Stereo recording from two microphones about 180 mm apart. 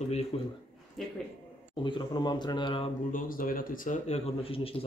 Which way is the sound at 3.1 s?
50° left (ahead or behind).